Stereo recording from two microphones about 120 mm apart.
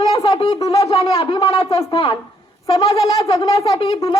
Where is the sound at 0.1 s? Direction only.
50° left (ahead or behind).